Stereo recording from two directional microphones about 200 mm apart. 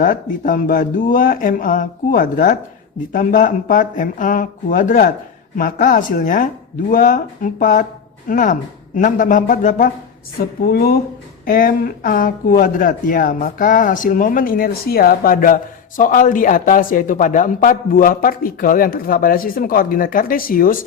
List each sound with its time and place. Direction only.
0.0 s speech: 40° left (ahead or behind)